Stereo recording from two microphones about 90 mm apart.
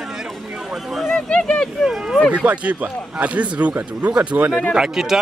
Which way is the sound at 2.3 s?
15° right (ahead or behind).